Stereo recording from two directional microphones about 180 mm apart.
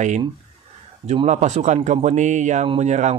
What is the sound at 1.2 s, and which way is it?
Speech, 40° right (ahead or behind).